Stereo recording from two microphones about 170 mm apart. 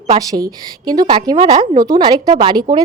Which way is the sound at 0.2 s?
20° right (ahead or behind).